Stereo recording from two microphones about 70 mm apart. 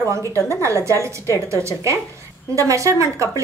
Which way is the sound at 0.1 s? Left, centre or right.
Right.